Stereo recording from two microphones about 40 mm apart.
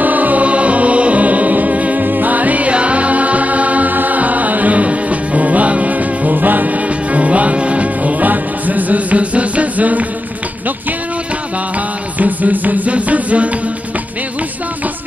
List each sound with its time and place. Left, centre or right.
0.0 s music: right
7.1 s music: right
12.2 s music: right